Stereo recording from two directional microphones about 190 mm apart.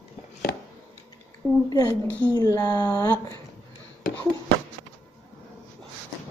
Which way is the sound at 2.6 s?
20° left (ahead or behind).